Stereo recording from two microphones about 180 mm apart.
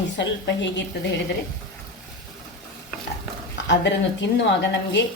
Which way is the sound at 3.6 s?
85° left.